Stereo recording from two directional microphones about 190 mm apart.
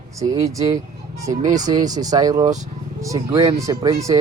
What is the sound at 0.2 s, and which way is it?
Speech, 15° right (ahead or behind).